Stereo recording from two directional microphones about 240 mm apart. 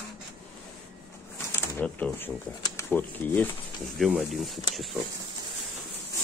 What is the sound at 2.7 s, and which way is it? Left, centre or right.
Speech, centre.